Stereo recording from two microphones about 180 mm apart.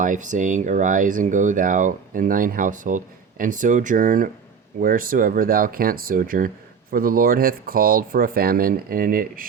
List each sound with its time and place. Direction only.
0.0 s speech: 45° right (ahead or behind)